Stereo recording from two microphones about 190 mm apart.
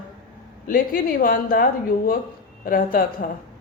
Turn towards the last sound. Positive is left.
turn(degrees=50)  # may be behind; listen again after turning